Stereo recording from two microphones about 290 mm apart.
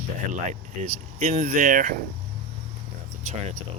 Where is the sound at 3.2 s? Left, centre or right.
Right.